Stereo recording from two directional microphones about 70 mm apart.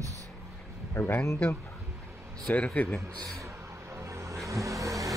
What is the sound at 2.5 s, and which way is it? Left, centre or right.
Speech, left.